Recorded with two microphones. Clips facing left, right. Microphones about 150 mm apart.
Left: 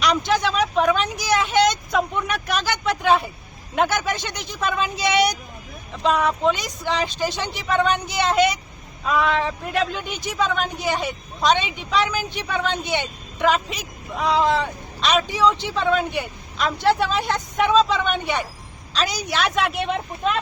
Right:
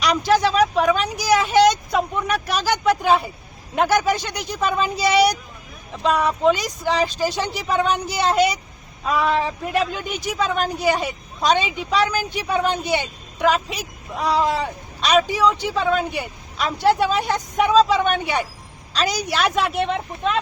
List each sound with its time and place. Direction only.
0.5 s a woman's voice: centre (ahead or behind)